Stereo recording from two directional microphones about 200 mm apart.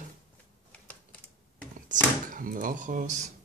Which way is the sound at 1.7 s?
40° right (ahead or behind).